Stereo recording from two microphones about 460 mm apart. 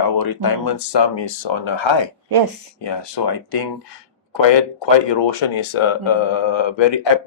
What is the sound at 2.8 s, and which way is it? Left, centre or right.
Speech, left.